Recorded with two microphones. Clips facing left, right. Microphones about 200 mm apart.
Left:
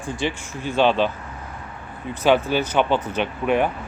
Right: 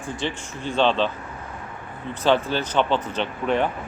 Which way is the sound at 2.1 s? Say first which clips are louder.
Left 2 dB; 10° left (ahead or behind).